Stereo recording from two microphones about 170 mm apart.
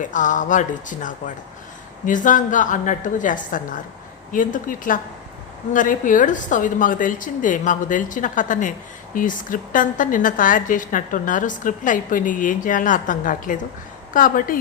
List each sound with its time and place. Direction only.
0.0 s a woman's voice: 50° left (ahead or behind)